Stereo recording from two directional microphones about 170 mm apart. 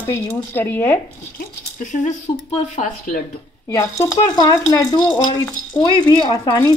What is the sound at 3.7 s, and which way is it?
A woman's voice, 15° left (ahead or behind).